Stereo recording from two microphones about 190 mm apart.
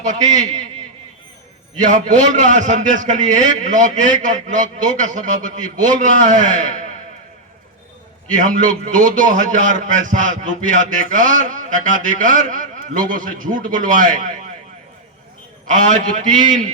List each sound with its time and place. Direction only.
0.0 s a man's voice: 40° right (ahead or behind)
1.8 s a man's voice: 40° right (ahead or behind)
8.3 s a man's voice: 45° right (ahead or behind)
15.7 s a man's voice: 40° right (ahead or behind)